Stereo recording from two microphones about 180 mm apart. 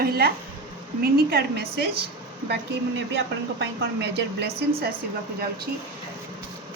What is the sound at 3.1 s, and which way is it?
A woman's voice, 75° right (ahead or behind).